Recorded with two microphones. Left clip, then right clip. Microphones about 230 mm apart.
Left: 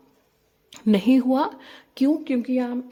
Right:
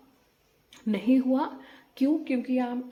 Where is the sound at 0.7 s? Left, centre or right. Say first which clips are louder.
Left 6 dB; left.